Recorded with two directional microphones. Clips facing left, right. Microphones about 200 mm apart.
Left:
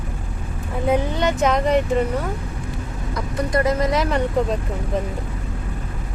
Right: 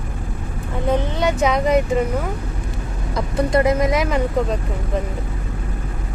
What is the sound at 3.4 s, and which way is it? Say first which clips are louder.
Speech: right 3 dB; 25° right (ahead or behind).